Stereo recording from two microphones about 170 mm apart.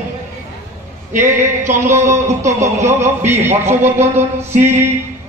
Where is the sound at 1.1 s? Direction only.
45° right (ahead or behind).